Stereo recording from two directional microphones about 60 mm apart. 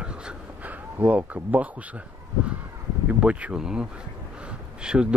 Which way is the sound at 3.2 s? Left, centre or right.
Right.